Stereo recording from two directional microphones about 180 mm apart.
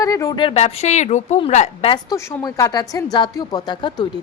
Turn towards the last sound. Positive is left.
turn(degrees=25)  # may be behind; listen again after turning